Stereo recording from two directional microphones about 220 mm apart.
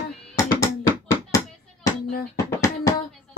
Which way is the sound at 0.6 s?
15° left (ahead or behind).